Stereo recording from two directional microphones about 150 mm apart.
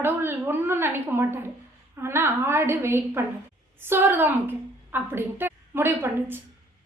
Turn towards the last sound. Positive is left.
turn(degrees=-15)  # may be behind; listen again after turning